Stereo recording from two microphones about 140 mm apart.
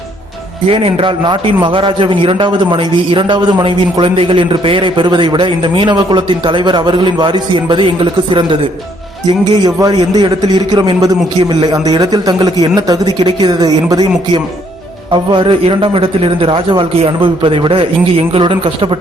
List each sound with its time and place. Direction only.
0.7 s a man's voice: 40° right (ahead or behind)
9.6 s a man's voice: 30° right (ahead or behind)
15.1 s a man's voice: 35° right (ahead or behind)